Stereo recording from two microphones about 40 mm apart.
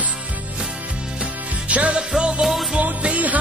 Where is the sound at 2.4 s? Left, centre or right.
Centre.